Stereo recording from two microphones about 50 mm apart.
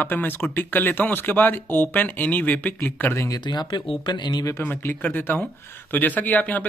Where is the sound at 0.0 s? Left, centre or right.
Left.